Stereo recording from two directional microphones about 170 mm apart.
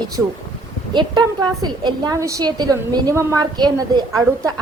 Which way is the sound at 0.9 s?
25° right (ahead or behind).